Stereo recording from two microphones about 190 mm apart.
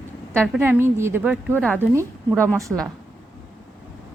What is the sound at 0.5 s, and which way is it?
Speech, 10° right (ahead or behind).